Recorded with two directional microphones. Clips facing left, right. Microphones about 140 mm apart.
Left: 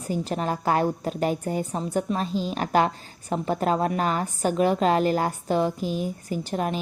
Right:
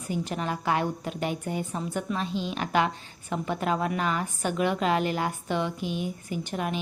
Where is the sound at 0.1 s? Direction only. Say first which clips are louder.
Left 4 dB; 40° left (ahead or behind).